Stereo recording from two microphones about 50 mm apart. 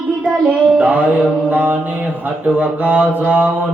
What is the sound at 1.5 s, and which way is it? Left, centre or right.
Mantra, right.